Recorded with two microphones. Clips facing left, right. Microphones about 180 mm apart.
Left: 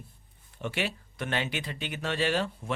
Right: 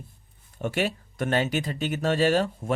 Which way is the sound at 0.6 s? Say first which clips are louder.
Right 6 dB; 45° right (ahead or behind).